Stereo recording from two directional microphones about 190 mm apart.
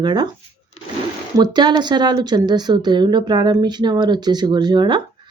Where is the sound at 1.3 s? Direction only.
20° right (ahead or behind).